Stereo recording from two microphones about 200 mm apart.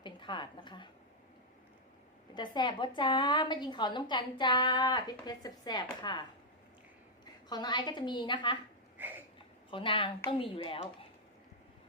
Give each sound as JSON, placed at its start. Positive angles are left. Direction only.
{"t": 0.0, "sound": "a woman's voice", "side_deg": 25}
{"t": 2.3, "sound": "a woman's voice", "side_deg": 20}
{"t": 7.5, "sound": "a woman's voice", "side_deg": 20}
{"t": 9.0, "sound": "a sound", "side_deg": -10}
{"t": 9.6, "sound": "a woman's voice", "side_deg": 25}